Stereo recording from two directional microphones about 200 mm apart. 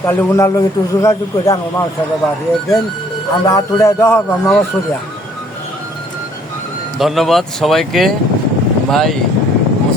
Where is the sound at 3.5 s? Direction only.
15° left (ahead or behind).